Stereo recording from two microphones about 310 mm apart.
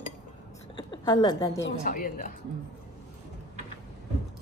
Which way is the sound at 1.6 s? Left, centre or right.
Left.